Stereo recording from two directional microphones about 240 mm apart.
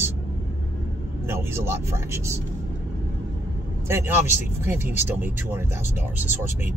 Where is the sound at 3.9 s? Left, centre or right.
Centre.